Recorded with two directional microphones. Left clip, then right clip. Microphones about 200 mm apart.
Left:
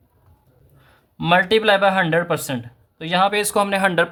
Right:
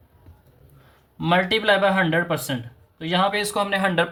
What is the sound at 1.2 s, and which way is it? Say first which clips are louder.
Speech: left 4 dB; 45° left (ahead or behind).